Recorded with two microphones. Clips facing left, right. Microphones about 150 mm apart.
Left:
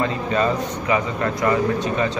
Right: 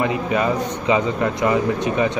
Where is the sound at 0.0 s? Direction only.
15° right (ahead or behind).